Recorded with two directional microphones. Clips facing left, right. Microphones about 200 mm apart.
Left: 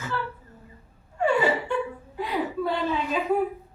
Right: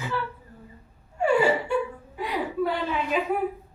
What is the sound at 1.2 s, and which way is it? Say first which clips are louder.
Gasp: right 1 dB; 10° right (ahead or behind).